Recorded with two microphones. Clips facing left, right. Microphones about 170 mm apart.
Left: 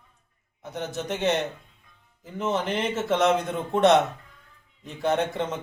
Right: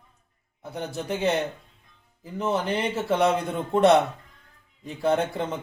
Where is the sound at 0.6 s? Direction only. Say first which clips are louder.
Even; centre (ahead or behind).